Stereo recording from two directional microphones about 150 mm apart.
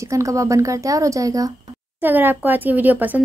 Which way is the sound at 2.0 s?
10° right (ahead or behind).